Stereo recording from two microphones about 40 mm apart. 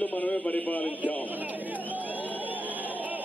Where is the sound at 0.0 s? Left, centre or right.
Left.